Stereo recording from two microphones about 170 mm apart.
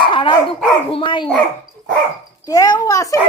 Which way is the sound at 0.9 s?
30° left (ahead or behind).